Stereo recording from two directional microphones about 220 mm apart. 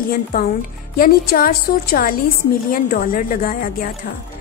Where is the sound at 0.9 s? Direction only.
40° left (ahead or behind).